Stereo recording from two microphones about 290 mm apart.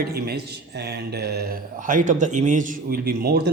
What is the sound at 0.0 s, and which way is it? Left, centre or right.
Speech, right.